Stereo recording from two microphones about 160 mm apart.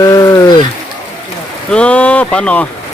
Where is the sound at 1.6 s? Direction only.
5° left (ahead or behind).